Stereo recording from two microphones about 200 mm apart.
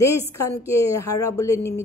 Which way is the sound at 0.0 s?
15° left (ahead or behind).